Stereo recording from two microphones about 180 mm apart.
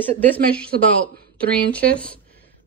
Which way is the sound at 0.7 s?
60° right (ahead or behind).